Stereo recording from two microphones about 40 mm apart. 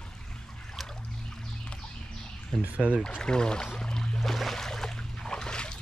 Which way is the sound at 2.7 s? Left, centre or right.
Right.